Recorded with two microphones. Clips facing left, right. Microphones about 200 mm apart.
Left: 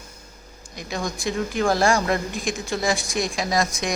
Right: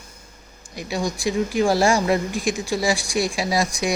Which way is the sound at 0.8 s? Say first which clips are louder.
Right 3 dB; 10° right (ahead or behind).